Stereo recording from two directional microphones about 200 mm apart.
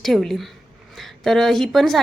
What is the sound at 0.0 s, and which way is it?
A woman's voice, centre (ahead or behind).